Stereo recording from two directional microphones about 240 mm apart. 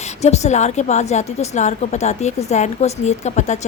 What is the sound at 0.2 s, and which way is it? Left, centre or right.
Speech, left.